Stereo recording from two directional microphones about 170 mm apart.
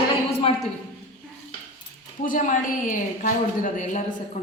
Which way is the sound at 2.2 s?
50° left (ahead or behind).